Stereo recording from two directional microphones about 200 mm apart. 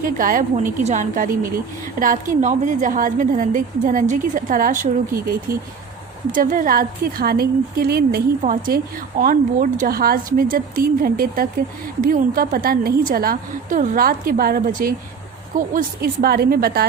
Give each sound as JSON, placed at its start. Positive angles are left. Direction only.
{"t": 0.0, "sound": "a woman's voice", "side_deg": -45}